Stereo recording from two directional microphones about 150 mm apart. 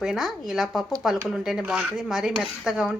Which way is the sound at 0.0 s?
5° right (ahead or behind).